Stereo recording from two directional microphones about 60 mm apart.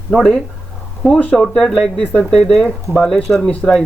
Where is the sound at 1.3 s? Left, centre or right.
Centre.